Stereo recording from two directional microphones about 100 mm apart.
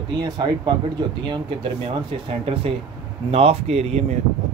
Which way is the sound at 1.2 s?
55° right (ahead or behind).